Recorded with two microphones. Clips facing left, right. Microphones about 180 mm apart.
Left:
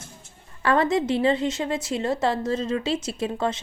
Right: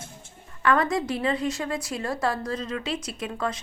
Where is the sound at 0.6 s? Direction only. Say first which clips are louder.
Left 2 dB; 30° left (ahead or behind).